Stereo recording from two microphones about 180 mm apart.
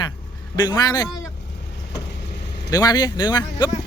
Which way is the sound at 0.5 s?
25° left (ahead or behind).